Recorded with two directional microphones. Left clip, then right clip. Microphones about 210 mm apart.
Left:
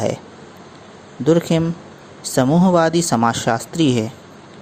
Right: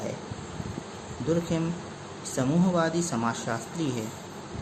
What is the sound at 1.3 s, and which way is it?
Speech, 40° left (ahead or behind).